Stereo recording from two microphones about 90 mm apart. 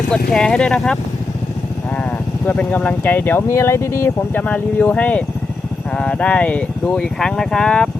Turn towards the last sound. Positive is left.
turn(degrees=10)  # may be behind; listen again after turning